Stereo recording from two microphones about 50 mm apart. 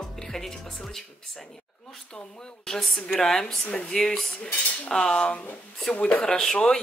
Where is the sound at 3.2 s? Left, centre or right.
Centre.